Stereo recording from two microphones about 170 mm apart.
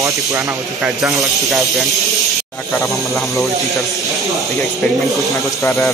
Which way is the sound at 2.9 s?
Centre (ahead or behind).